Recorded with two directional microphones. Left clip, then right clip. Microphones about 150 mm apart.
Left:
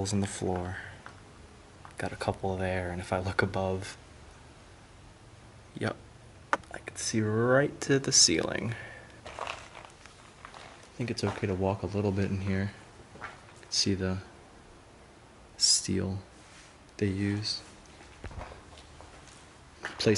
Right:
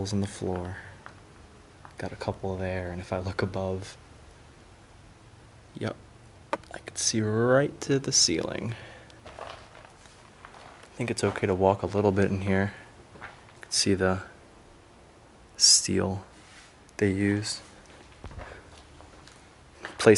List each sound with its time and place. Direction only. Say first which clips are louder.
0.0 s speech: even; centre (ahead or behind)
2.0 s speech: left 1 dB; centre (ahead or behind)
5.8 s speech: even; centre (ahead or behind)
11.0 s speech: right 5 dB; 20° right (ahead or behind)
15.8 s speech: right 6 dB; 20° right (ahead or behind)